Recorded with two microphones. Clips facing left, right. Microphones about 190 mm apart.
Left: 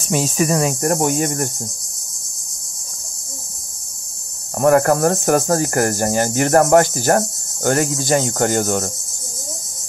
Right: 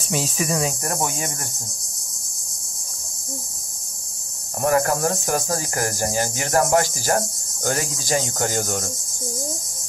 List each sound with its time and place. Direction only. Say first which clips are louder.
0.1 s cricket: left 6 dB; 50° left (ahead or behind)
4.6 s cricket: left 6 dB; 55° left (ahead or behind)